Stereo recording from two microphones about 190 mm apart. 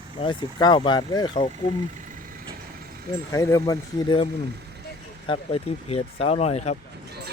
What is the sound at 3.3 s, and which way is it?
Speech, 15° left (ahead or behind).